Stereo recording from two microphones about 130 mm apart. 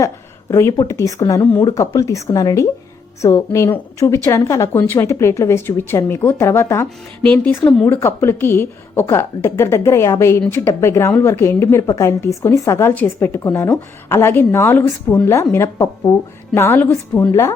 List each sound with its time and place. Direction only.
0.5 s a woman's voice: 25° left (ahead or behind)